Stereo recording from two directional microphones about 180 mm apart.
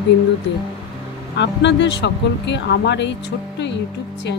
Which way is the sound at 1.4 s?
80° left.